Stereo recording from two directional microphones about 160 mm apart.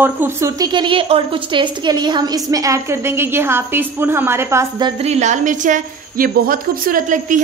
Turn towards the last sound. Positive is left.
turn(degrees=-55)  # may be behind; listen again after turning